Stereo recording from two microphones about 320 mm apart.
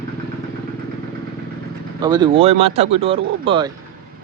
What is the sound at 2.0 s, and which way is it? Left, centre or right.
Speech, centre.